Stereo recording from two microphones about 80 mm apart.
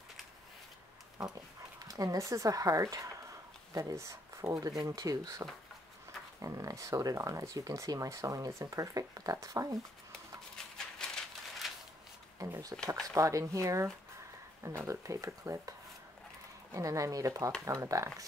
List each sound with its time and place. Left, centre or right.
1.9 s speech: right
11.0 s a sound: centre
12.4 s speech: right
16.7 s speech: right